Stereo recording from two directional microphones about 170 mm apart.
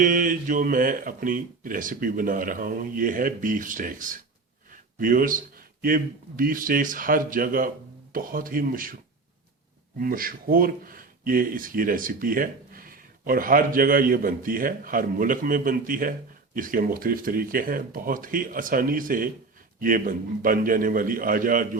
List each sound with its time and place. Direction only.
0.0 s a man's voice: 50° right (ahead or behind)
10.0 s speech: 55° right (ahead or behind)